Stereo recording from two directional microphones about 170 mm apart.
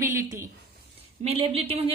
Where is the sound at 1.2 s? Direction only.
35° right (ahead or behind).